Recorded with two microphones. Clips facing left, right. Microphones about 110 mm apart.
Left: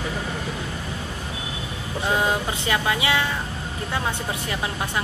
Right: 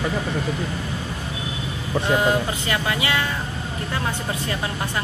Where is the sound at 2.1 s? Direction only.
20° left (ahead or behind).